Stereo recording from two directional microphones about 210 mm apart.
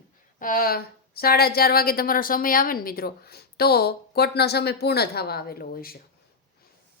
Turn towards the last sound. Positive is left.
turn(degrees=45)  # may be behind; listen again after turning